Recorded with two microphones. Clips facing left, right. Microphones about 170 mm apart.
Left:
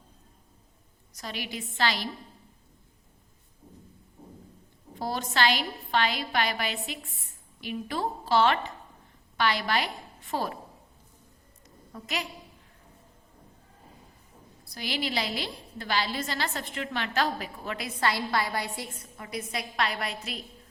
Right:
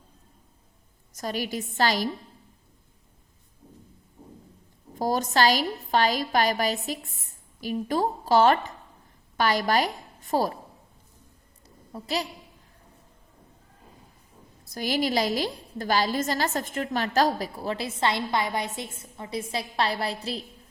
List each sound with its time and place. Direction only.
1.1 s a woman's voice: 45° right (ahead or behind)
4.9 s a woman's voice: 40° right (ahead or behind)
11.9 s a woman's voice: 30° right (ahead or behind)
14.6 s a woman's voice: 45° right (ahead or behind)